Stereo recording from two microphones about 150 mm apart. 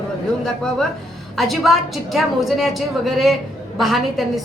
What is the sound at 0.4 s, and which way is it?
A woman's voice, 5° left (ahead or behind).